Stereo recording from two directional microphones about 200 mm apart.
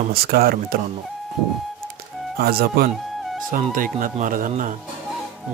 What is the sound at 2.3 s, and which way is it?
Speech, 50° right (ahead or behind).